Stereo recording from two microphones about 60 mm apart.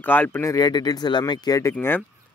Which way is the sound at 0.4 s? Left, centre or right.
Left.